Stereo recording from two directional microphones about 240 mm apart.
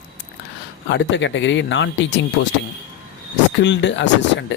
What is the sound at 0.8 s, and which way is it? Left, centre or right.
Speech, left.